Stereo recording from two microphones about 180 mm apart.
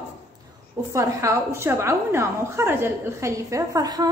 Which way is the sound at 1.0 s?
15° right (ahead or behind).